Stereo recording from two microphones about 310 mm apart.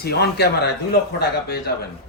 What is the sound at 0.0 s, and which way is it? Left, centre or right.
Speech, left.